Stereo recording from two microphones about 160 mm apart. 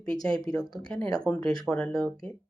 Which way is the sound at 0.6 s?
25° left (ahead or behind).